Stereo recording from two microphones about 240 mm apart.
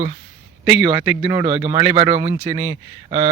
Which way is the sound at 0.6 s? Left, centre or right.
Centre.